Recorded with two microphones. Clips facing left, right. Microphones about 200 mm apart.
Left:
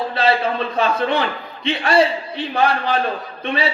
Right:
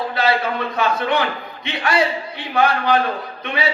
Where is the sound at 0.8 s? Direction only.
30° left (ahead or behind).